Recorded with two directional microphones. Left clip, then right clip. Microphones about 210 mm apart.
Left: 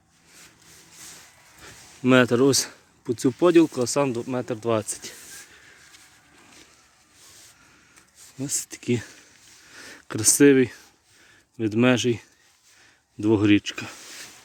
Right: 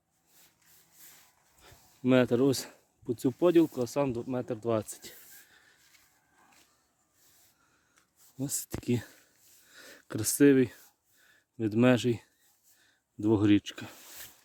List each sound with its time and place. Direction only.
1.6 s speech: 5° right (ahead or behind)
8.4 s speech: 30° right (ahead or behind)